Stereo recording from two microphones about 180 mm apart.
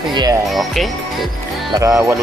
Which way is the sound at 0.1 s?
25° right (ahead or behind).